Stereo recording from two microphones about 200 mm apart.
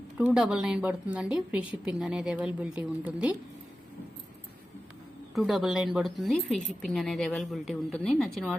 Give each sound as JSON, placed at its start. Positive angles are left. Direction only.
{"t": 0.2, "sound": "a woman's voice", "side_deg": -5}
{"t": 5.3, "sound": "a woman's voice", "side_deg": 0}